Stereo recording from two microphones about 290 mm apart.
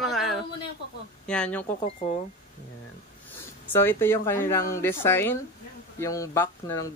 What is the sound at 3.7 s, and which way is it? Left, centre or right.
Speech, centre.